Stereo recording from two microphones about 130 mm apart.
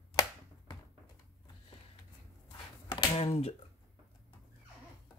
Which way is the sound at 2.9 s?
45° left (ahead or behind).